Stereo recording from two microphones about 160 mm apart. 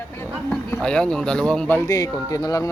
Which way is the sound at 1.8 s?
20° left (ahead or behind).